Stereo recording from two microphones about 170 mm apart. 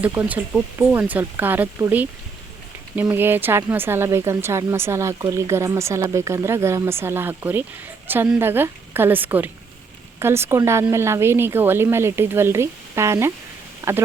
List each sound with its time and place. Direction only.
0.0 s speech: 10° right (ahead or behind)